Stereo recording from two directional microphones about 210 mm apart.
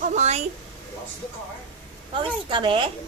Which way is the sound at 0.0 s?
35° right (ahead or behind).